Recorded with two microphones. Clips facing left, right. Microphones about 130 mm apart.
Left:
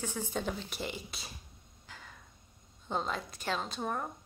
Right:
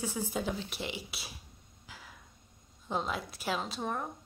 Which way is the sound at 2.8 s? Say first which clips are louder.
Right 1 dB; 5° right (ahead or behind).